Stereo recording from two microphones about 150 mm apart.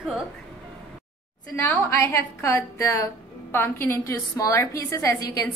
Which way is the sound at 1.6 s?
15° left (ahead or behind).